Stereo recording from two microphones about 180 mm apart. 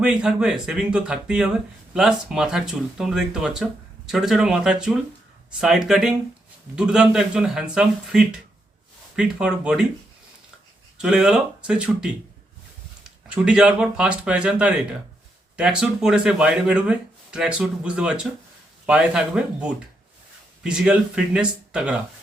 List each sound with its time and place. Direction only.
0.0 s speech: 5° right (ahead or behind)
10.9 s speech: 5° right (ahead or behind)
13.2 s speech: 5° right (ahead or behind)